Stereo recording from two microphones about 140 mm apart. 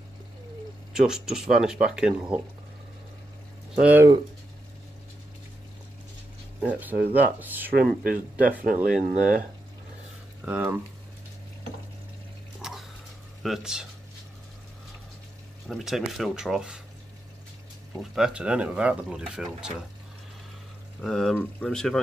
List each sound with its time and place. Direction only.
0.9 s speech: 5° right (ahead or behind)
3.7 s speech: 10° right (ahead or behind)
6.6 s speech: 10° right (ahead or behind)
7.7 s speech: 90° right
8.4 s speech: 10° right (ahead or behind)
10.4 s speech: 10° right (ahead or behind)
12.6 s bathtub: 5° right (ahead or behind)
13.4 s speech: 5° right (ahead or behind)
15.7 s speech: centre (ahead or behind)
18.1 s speech: 5° right (ahead or behind)
21.0 s speech: centre (ahead or behind)